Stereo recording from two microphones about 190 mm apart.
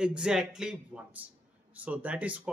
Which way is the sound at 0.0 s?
5° right (ahead or behind).